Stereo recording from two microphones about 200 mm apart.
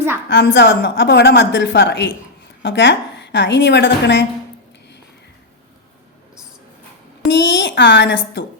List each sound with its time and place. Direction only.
0.3 s a woman's voice: 60° left (ahead or behind)
7.3 s a woman's voice: 60° left (ahead or behind)